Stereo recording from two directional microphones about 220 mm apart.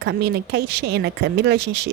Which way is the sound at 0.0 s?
50° right (ahead or behind).